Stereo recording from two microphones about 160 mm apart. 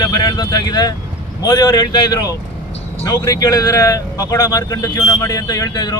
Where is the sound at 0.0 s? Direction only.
25° left (ahead or behind).